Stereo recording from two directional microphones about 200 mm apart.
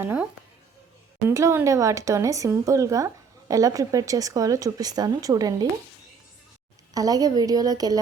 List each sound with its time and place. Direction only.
0.0 s speech: 10° right (ahead or behind)
1.3 s speech: 15° right (ahead or behind)
6.9 s a woman's voice: 20° right (ahead or behind)